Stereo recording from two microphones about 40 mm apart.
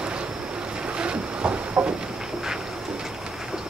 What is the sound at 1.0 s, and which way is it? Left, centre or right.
Vehicle, right.